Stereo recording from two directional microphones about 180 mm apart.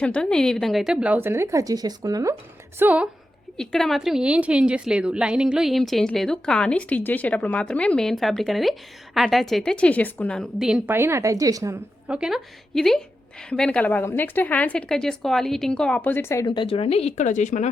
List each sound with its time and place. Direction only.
0.0 s a woman's voice: 5° left (ahead or behind); by 2.3 s 20° right (ahead or behind)
2.7 s a woman's voice: 10° right (ahead or behind)
3.6 s a woman's voice: 5° left (ahead or behind); by 11.8 s 20° right (ahead or behind)
12.0 s a woman's voice: 5° right (ahead or behind); by 16.5 s 15° left (ahead or behind)
16.5 s speech: 30° left (ahead or behind)